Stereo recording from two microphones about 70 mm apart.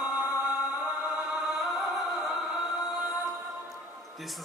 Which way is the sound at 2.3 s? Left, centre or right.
Centre.